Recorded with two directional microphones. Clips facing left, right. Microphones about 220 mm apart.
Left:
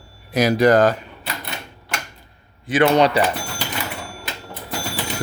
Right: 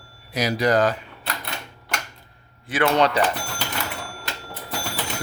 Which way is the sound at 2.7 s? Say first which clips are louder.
Left 4 dB; 15° left (ahead or behind).